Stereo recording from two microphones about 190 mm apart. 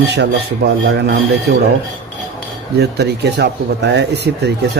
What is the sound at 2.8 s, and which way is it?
Speech, 60° right (ahead or behind).